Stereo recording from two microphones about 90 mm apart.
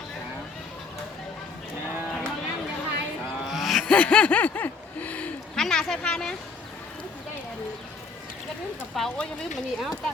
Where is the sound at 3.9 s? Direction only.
15° left (ahead or behind).